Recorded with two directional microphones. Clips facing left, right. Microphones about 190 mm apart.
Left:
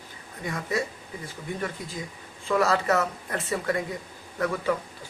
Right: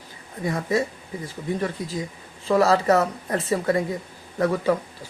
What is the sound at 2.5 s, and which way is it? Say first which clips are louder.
Speech: right 5 dB; 35° right (ahead or behind).